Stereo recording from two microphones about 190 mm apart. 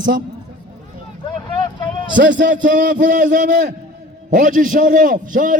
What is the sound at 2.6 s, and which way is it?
A man's voice, 45° right (ahead or behind).